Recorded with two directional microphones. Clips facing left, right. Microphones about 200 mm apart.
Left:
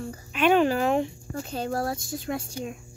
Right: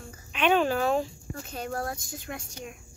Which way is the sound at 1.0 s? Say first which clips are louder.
Left 5 dB; 30° left (ahead or behind).